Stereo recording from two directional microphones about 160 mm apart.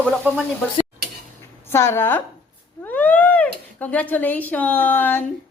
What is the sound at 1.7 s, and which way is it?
Speech, 15° left (ahead or behind).